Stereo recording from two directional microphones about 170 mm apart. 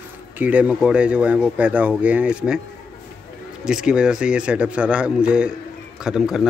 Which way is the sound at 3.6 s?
5° right (ahead or behind).